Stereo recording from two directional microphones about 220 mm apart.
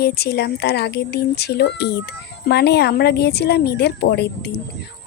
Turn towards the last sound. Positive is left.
turn(degrees=50)  # may be behind; listen again after turning